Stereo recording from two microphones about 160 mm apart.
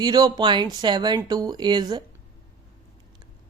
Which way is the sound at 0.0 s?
25° right (ahead or behind).